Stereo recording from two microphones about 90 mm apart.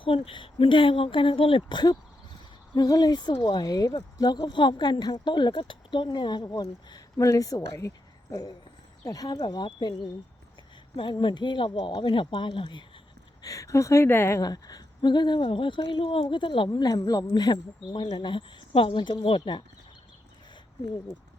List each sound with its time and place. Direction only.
0.0 s speech: 80° left
2.7 s speech: 45° left (ahead or behind)
6.5 s speech: 40° left (ahead or behind); by 12.8 s 65° left (ahead or behind)
13.4 s a woman's voice: 40° left (ahead or behind)
14.4 s speech: 45° left (ahead or behind); by 16.6 s 65° left (ahead or behind)
16.7 s speech: 50° left (ahead or behind); by 19.6 s 65° left (ahead or behind)